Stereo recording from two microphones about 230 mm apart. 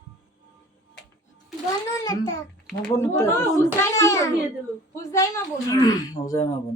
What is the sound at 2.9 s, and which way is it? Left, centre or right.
Speech, centre.